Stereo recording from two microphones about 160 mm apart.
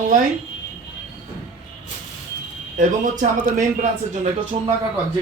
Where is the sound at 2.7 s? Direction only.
55° right (ahead or behind).